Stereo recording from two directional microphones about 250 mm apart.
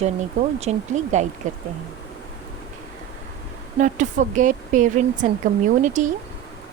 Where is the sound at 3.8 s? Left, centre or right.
Right.